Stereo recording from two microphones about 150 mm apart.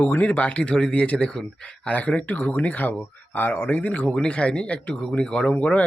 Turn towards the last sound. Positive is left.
turn(degrees=10)  # may be behind; listen again after turning